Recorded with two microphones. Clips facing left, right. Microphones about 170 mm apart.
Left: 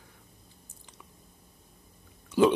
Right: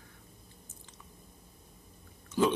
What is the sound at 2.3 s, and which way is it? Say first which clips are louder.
Chewing: left 5 dB; 15° left (ahead or behind).